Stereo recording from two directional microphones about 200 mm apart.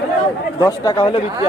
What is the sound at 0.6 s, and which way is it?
Speech, 20° left (ahead or behind).